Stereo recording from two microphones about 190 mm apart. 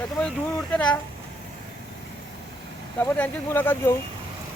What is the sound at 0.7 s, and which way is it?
Speech, 5° left (ahead or behind).